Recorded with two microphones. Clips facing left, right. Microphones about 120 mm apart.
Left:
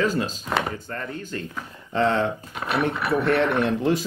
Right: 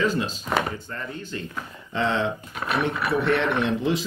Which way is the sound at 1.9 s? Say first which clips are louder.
Left 3 dB; 45° left (ahead or behind).